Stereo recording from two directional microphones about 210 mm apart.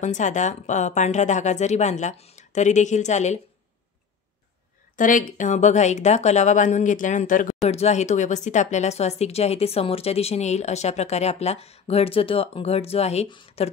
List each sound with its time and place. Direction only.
0.0 s speech: 35° left (ahead or behind)
4.9 s speech: 40° left (ahead or behind)